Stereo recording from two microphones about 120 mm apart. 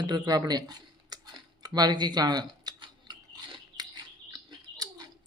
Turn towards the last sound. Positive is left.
turn(degrees=-35)  # may be behind; listen again after turning